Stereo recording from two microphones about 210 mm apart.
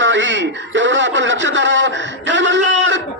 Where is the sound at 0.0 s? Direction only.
60° right (ahead or behind).